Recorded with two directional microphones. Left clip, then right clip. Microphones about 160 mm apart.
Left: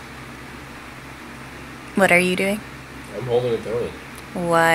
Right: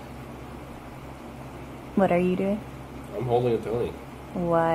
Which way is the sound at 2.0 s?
20° left (ahead or behind).